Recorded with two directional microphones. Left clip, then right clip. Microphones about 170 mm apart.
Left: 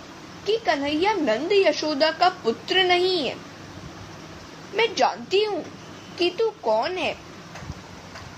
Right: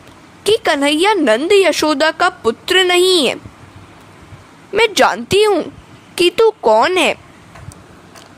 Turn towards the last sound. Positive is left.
turn(degrees=-60)  # may be behind; listen again after turning